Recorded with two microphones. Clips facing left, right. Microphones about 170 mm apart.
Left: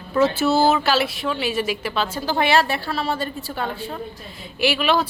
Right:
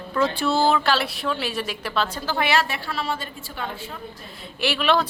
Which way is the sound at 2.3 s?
30° left (ahead or behind).